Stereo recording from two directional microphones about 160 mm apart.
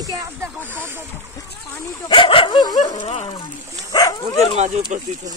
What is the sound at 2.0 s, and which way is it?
Speech, 30° left (ahead or behind).